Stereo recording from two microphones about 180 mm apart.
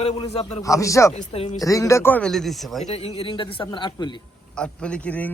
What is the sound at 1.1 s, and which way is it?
Speech, 35° left (ahead or behind).